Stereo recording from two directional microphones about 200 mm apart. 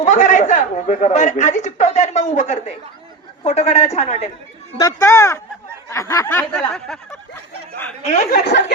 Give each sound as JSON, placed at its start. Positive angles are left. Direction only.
{"t": 0.0, "sound": "a woman's voice", "side_deg": 40}
{"t": 4.8, "sound": "speech", "side_deg": 15}
{"t": 8.0, "sound": "a woman's voice", "side_deg": 40}